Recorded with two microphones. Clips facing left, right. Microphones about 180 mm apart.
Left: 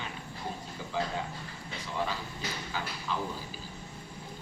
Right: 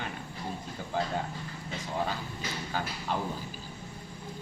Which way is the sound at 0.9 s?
50° right (ahead or behind).